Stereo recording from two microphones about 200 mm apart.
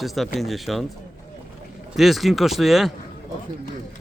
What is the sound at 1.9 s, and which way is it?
Speech, centre (ahead or behind).